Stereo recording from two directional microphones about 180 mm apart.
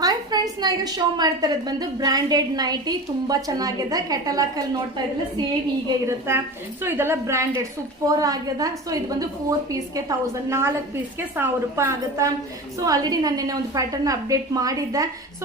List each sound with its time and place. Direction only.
0.0 s a sound: 20° right (ahead or behind)
0.6 s a woman's voice: 20° right (ahead or behind)
6.1 s a woman's voice: 15° right (ahead or behind)